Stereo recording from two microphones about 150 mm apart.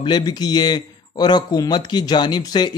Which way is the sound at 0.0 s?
30° left (ahead or behind).